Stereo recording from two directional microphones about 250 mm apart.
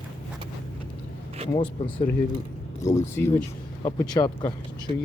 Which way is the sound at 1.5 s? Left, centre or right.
Left.